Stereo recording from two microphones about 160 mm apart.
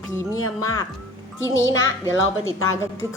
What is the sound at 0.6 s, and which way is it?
A woman's voice, 20° left (ahead or behind).